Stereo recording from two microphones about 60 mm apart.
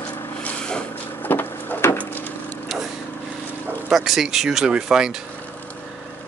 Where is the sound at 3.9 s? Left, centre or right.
Centre.